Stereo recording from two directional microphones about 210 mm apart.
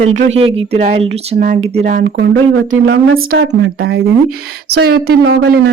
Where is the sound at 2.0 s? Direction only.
60° right (ahead or behind).